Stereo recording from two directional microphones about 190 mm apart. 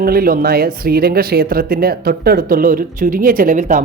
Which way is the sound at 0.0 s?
50° right (ahead or behind).